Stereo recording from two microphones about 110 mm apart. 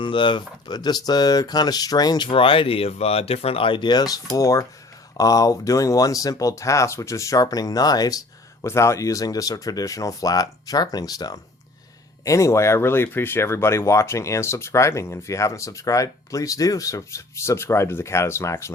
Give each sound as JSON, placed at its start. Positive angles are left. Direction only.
{"t": 0.0, "sound": "speech", "side_deg": 45}
{"t": 8.6, "sound": "speech", "side_deg": 25}